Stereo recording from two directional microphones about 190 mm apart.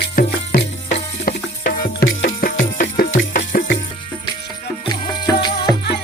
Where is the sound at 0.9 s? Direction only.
40° left (ahead or behind).